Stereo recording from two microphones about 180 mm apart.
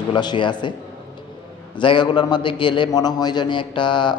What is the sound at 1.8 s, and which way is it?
Speech, 25° left (ahead or behind).